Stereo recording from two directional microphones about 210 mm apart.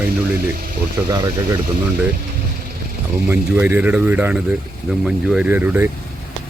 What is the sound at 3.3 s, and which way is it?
Speech, 10° right (ahead or behind).